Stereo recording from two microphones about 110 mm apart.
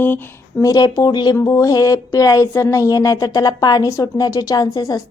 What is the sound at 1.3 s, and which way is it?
Speech, 30° left (ahead or behind).